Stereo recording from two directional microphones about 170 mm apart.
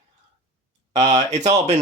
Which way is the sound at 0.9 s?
40° right (ahead or behind).